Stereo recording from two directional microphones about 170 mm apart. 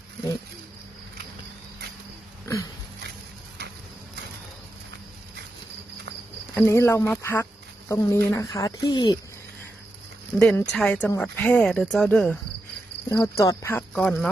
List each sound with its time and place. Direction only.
6.5 s speech: 15° left (ahead or behind)
10.3 s speech: 5° left (ahead or behind)
13.2 s speech: 20° left (ahead or behind)
13.9 s speech: 5° left (ahead or behind)